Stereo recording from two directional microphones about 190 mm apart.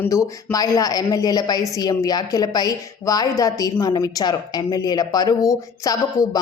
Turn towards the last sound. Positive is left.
turn(degrees=15)  # may be behind; listen again after turning